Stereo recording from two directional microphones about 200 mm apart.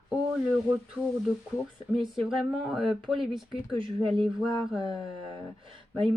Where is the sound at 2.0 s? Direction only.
Centre (ahead or behind).